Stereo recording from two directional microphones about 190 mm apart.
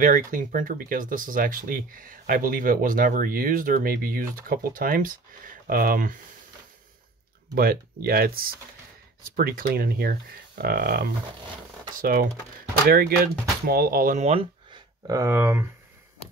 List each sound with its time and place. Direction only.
0.0 s speech: 45° right (ahead or behind)
7.5 s speech: 50° right (ahead or behind); by 14.8 s 35° right (ahead or behind)
15.0 s speech: 15° right (ahead or behind)